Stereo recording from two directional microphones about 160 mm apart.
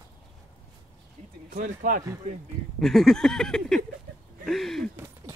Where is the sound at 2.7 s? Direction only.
Centre (ahead or behind).